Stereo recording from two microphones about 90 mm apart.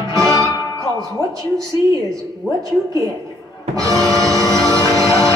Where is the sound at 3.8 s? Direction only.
40° right (ahead or behind).